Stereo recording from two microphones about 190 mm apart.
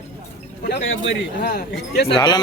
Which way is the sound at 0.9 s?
75° left (ahead or behind).